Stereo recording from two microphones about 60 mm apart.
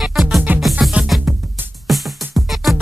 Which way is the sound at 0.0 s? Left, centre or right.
Centre.